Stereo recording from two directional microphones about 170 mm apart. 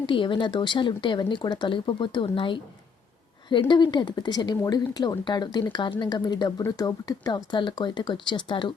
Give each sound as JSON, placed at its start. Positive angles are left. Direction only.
{"t": 0.0, "sound": "speech", "side_deg": 30}